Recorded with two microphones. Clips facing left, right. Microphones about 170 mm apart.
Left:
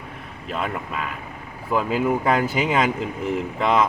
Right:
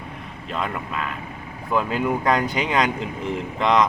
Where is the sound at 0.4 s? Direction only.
5° left (ahead or behind).